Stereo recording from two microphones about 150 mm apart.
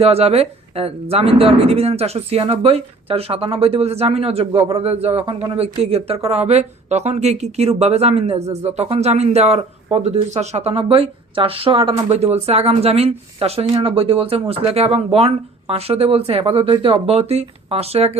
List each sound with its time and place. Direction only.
0.0 s speech: 40° right (ahead or behind)
12.1 s speech: 45° right (ahead or behind)